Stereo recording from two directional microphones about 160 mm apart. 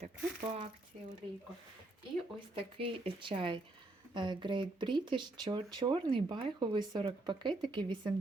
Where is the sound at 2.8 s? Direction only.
30° right (ahead or behind).